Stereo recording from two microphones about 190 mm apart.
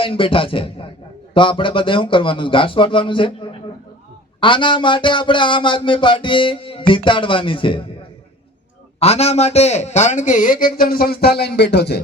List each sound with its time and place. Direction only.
0.0 s speech: 30° left (ahead or behind)
9.0 s a man's voice: 35° left (ahead or behind); by 11.9 s 60° left (ahead or behind)